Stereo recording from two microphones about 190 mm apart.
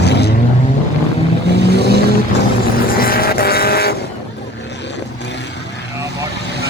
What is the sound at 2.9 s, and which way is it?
Vehicle, 50° left (ahead or behind).